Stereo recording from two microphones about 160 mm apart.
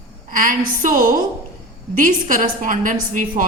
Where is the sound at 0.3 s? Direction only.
55° right (ahead or behind).